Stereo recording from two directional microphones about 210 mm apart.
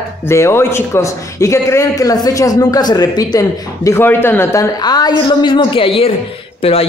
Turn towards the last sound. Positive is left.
turn(degrees=25)  # may be behind; listen again after turning